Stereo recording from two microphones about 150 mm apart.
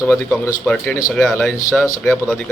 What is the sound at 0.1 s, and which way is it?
A man's voice, 5° left (ahead or behind).